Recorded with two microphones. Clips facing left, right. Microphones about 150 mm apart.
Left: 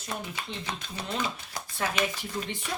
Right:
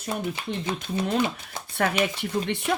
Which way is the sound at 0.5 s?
55° right (ahead or behind).